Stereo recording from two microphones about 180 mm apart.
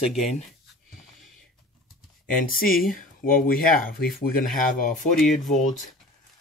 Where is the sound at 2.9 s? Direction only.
50° left (ahead or behind).